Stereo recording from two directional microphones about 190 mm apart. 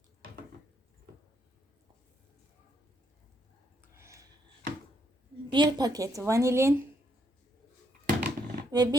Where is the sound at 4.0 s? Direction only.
15° right (ahead or behind).